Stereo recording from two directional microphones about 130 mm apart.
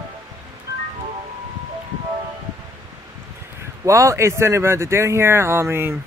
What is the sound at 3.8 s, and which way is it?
Speech, 25° right (ahead or behind).